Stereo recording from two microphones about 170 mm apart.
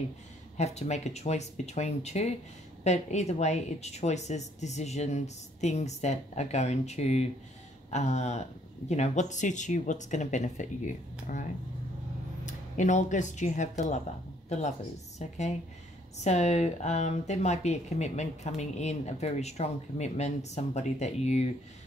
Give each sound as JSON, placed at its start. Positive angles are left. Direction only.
{"t": 0.6, "sound": "speech", "side_deg": 40}
{"t": 12.4, "sound": "speech", "side_deg": 45}
{"t": 15.1, "sound": "speech", "side_deg": 40}